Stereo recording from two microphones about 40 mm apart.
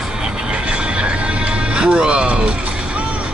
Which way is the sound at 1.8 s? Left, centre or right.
Right.